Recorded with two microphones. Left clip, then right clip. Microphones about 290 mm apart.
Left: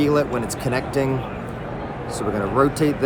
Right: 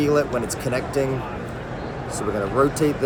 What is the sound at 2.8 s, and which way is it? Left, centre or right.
Speech, centre.